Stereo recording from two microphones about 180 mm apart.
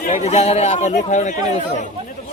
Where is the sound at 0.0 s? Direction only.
45° left (ahead or behind).